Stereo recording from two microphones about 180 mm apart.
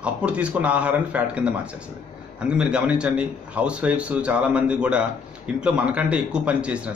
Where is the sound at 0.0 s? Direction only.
5° right (ahead or behind).